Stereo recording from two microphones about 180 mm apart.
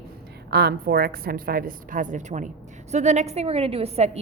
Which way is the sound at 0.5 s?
60° right (ahead or behind).